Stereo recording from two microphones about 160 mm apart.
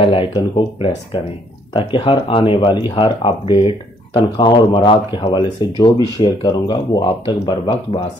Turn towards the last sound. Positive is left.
turn(degrees=35)  # may be behind; listen again after turning